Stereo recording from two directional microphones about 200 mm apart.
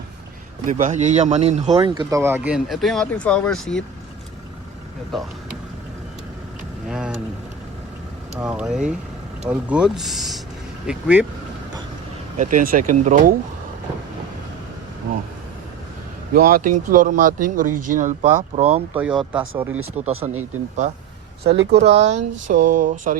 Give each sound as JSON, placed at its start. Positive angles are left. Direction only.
{"t": 0.7, "sound": "speech", "side_deg": -40}
{"t": 1.7, "sound": "speech", "side_deg": -20}
{"t": 5.1, "sound": "speech", "side_deg": 0}
{"t": 6.8, "sound": "speech", "side_deg": -5}
{"t": 8.4, "sound": "speech", "side_deg": -5}
{"t": 12.4, "sound": "speech", "side_deg": -40}
{"t": 16.3, "sound": "speech", "side_deg": -45}
{"t": 18.9, "sound": "speech", "side_deg": -5}
{"t": 20.2, "sound": "speech", "side_deg": -20}
{"t": 21.4, "sound": "speech", "side_deg": -60}
{"t": 21.8, "sound": "speech", "side_deg": -35}